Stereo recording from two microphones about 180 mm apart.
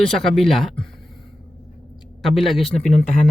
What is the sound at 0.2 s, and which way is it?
Speech, centre (ahead or behind).